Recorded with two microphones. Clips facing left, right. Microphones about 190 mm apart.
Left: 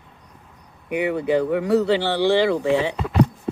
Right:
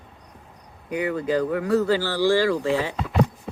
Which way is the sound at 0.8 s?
20° left (ahead or behind).